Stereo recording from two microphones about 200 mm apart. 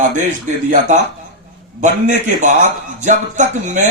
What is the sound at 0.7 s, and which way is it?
A man's voice, 35° right (ahead or behind).